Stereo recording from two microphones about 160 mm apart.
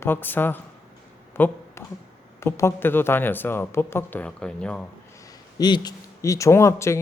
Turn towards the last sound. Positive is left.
turn(degrees=15)  # may be behind; listen again after turning